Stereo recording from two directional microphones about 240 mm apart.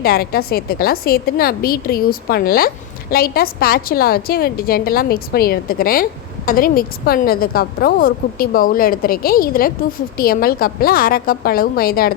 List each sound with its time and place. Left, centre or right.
0.0 s a woman's voice: left